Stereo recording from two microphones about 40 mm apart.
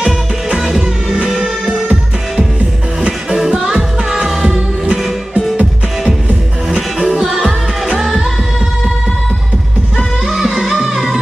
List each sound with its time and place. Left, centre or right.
0.7 s music: centre
3.3 s music: centre
5.6 s music: right
7.2 s music: centre
10.2 s music: centre